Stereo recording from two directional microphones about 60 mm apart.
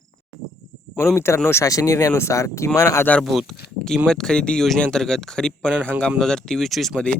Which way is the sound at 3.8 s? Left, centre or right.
Centre.